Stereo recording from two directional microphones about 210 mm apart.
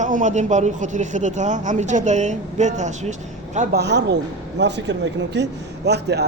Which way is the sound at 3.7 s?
50° right (ahead or behind).